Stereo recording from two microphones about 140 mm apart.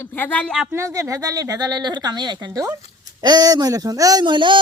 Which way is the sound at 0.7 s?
20° right (ahead or behind).